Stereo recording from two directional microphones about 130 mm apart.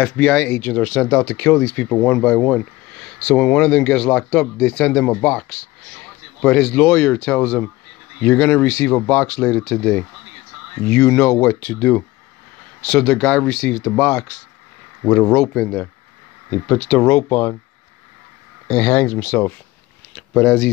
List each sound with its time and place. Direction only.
0.0 s speech: 5° left (ahead or behind)
17.3 s speech: 15° left (ahead or behind)
18.7 s speech: 15° left (ahead or behind)